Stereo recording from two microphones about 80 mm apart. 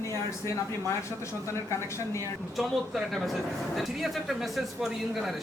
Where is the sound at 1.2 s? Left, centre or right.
Left.